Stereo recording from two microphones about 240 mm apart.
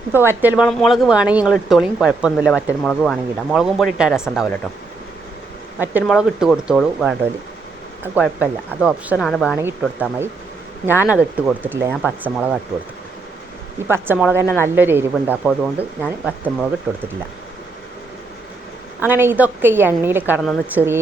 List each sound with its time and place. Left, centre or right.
0.1 s speech: centre
5.8 s a woman's voice: centre
13.8 s a woman's voice: centre
14.4 s speech: centre
14.8 s a woman's voice: centre
18.9 s a woman's voice: centre